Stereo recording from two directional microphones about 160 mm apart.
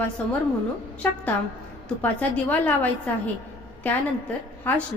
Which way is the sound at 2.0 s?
10° left (ahead or behind).